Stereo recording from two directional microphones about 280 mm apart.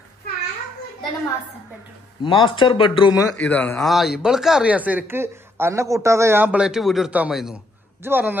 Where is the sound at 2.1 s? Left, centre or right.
Centre.